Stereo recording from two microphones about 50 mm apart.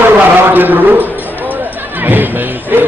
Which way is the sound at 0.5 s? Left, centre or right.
Right.